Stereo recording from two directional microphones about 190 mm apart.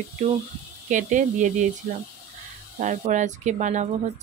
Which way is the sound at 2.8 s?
40° right (ahead or behind).